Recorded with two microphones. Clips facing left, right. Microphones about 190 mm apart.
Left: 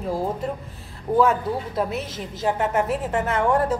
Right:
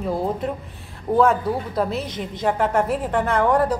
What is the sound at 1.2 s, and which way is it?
A woman's voice, centre (ahead or behind).